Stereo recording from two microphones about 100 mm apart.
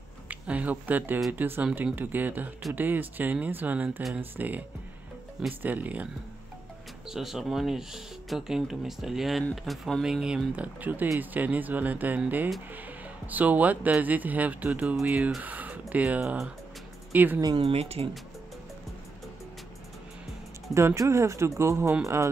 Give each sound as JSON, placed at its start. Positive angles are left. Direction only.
{"t": 0.3, "sound": "speech", "side_deg": -15}
{"t": 7.1, "sound": "speech", "side_deg": -5}
{"t": 10.0, "sound": "speech", "side_deg": -5}
{"t": 13.3, "sound": "speech", "side_deg": -15}
{"t": 17.6, "sound": "speech", "side_deg": -85}
{"t": 20.7, "sound": "speech", "side_deg": -30}